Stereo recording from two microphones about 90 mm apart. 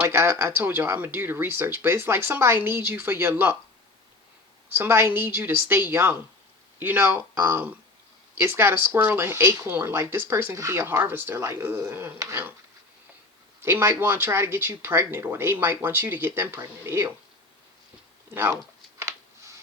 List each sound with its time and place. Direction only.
0.0 s speech: 30° right (ahead or behind)
4.7 s speech: 25° right (ahead or behind)
11.0 s speech: 20° right (ahead or behind)
13.6 s speech: 25° right (ahead or behind)
18.5 s a sound: 35° right (ahead or behind)